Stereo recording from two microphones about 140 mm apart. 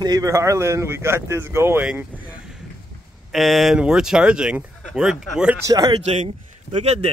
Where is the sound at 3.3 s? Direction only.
Centre (ahead or behind).